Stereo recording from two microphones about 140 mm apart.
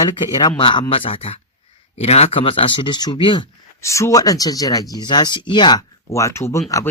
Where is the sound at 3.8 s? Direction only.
20° left (ahead or behind).